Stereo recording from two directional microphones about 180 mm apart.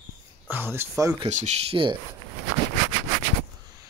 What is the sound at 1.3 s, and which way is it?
Speech, 40° right (ahead or behind).